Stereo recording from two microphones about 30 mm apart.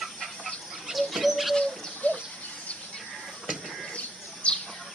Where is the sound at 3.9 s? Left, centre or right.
Left.